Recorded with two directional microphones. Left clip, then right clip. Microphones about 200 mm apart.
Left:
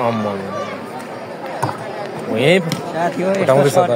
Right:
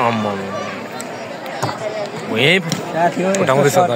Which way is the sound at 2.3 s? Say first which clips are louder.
Even; 5° left (ahead or behind).